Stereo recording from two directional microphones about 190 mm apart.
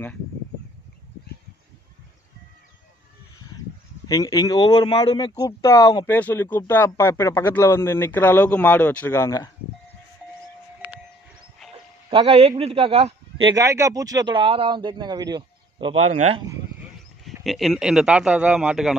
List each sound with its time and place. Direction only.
4.1 s a man's voice: 20° left (ahead or behind)
12.1 s speech: 30° right (ahead or behind)
16.0 s speech: 35° right (ahead or behind)
17.2 s speech: centre (ahead or behind)